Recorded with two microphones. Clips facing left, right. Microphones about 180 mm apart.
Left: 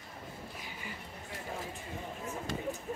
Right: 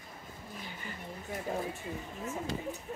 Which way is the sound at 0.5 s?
10° left (ahead or behind).